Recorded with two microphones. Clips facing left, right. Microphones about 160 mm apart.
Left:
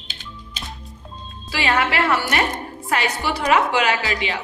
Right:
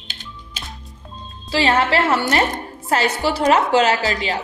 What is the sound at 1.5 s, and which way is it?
A woman's voice, 30° right (ahead or behind).